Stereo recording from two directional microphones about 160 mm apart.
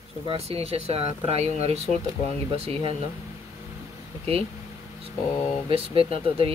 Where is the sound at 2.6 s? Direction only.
35° right (ahead or behind).